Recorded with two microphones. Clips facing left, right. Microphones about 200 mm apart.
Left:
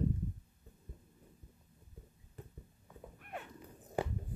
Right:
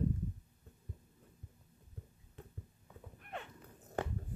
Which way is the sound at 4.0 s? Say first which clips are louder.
Left 2 dB; 10° left (ahead or behind).